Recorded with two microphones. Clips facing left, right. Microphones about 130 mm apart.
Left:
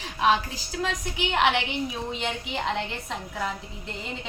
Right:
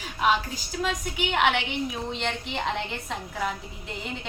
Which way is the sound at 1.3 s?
Centre (ahead or behind).